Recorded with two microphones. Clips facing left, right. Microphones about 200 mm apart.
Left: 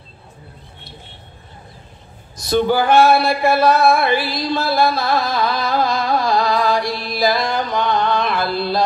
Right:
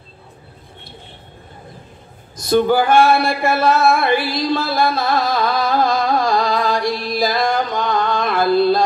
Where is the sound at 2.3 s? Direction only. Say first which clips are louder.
Right 2 dB; 50° right (ahead or behind).